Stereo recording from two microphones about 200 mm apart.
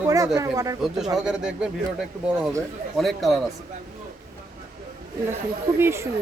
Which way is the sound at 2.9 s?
Centre (ahead or behind).